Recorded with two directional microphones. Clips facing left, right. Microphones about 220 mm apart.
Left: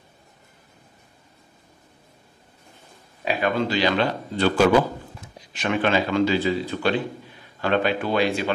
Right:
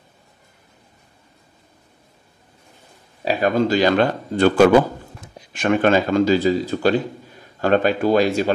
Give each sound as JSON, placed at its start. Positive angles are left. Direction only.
{"t": 3.3, "sound": "a man's voice", "side_deg": -40}